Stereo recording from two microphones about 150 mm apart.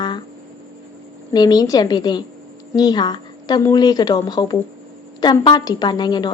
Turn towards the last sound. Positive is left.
turn(degrees=30)  # may be behind; listen again after turning